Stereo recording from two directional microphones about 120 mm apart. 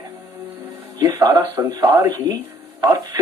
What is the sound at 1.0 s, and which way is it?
Speech, 30° right (ahead or behind).